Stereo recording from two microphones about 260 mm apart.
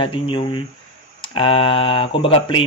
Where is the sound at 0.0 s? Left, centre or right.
Centre.